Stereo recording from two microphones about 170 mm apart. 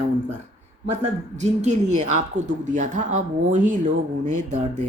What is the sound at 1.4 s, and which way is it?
Speech, 45° right (ahead or behind).